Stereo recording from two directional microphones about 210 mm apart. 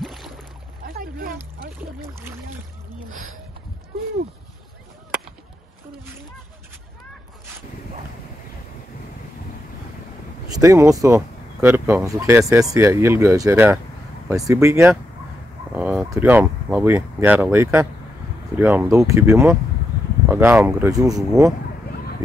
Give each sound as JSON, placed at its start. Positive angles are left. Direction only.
{"t": 0.0, "sound": "boat", "side_deg": 0}
{"t": 0.8, "sound": "boat", "side_deg": -45}
{"t": 2.0, "sound": "a sound", "side_deg": -10}
{"t": 10.6, "sound": "speech", "side_deg": -15}